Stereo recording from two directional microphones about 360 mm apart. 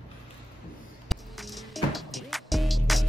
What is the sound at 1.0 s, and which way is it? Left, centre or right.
Music, centre.